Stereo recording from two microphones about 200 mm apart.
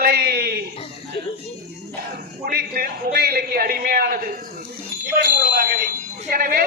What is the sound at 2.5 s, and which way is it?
A man's voice, 50° right (ahead or behind).